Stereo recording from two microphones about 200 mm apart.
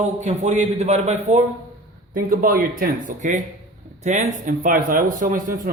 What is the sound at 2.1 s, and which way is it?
A man's voice, 45° right (ahead or behind).